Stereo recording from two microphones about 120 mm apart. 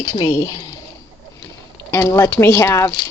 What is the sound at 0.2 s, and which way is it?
Speech, 25° left (ahead or behind).